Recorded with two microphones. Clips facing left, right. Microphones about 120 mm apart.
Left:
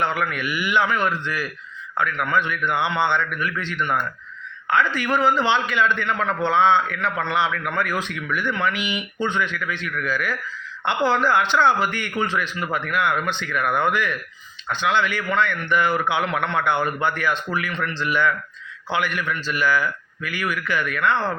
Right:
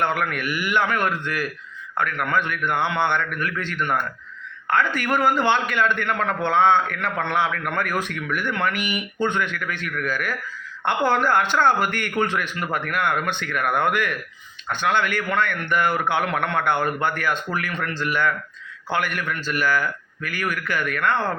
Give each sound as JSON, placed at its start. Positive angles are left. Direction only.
{"t": 0.0, "sound": "a man's voice", "side_deg": -50}